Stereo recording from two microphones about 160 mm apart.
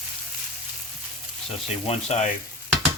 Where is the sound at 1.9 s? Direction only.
40° left (ahead or behind).